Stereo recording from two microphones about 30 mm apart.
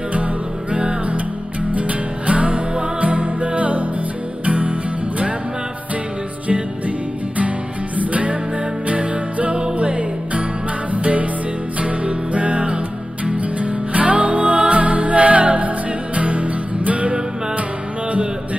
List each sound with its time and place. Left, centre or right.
0.7 s music: right
1.7 s music: right
8.0 s music: right
11.8 s music: right